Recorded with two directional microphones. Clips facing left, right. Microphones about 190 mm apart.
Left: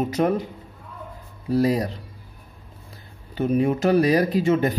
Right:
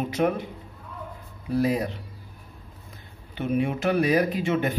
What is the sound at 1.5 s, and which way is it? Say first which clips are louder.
Speech: left 3 dB; 35° left (ahead or behind).